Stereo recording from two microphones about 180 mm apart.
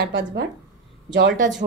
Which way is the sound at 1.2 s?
50° right (ahead or behind).